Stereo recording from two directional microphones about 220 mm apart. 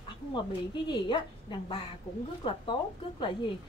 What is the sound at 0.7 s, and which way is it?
A woman's voice, 20° left (ahead or behind).